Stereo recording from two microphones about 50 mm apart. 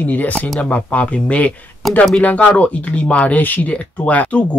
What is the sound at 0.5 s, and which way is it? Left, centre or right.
Speech, left.